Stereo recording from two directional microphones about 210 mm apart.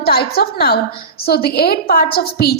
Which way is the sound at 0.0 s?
50° left (ahead or behind).